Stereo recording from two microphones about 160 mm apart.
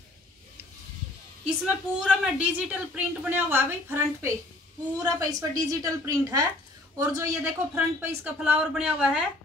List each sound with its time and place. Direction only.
1.6 s a woman's voice: 5° right (ahead or behind)